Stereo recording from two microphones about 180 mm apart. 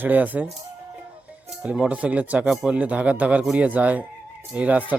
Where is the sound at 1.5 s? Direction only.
5° right (ahead or behind).